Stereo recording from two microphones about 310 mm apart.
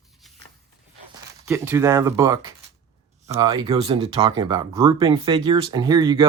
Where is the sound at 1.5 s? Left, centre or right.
Centre.